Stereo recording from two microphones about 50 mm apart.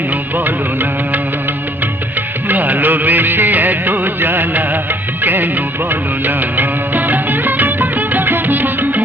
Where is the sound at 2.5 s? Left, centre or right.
Right.